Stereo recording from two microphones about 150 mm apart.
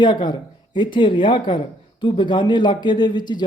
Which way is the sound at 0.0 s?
30° left (ahead or behind).